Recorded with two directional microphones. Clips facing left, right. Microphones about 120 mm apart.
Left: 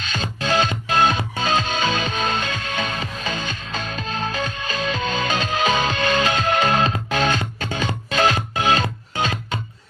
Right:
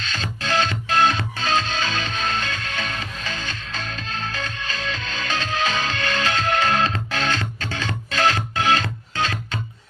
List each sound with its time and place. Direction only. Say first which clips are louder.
0.0 s music: left 3 dB; 15° left (ahead or behind)